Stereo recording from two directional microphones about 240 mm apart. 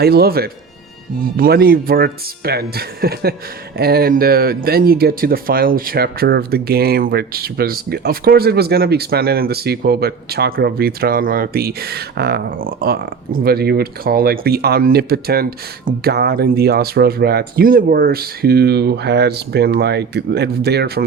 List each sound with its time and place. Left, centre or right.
0.0 s speech: right